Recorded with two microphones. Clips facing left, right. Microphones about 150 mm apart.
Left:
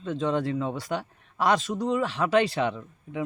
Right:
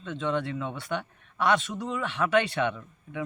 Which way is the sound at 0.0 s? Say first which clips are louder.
Left 3 dB; 35° left (ahead or behind).